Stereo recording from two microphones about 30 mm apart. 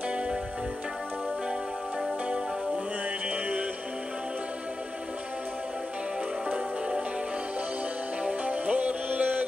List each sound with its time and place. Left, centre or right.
3.3 s music: right
8.5 s music: right